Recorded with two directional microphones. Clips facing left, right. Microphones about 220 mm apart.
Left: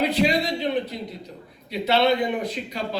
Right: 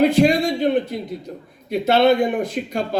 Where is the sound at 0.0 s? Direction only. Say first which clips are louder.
Right 6 dB; 50° right (ahead or behind).